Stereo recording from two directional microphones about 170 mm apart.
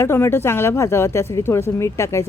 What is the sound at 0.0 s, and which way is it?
Speech, 15° left (ahead or behind).